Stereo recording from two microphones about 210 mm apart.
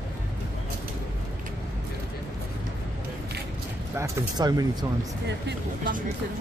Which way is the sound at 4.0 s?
15° right (ahead or behind).